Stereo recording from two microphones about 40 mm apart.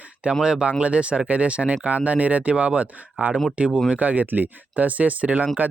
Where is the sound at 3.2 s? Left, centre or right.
Right.